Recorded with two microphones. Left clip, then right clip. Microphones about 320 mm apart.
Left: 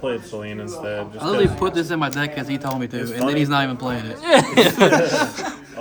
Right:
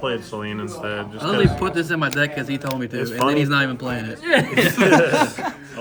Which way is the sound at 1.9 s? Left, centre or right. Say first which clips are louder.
Right 2 dB; centre.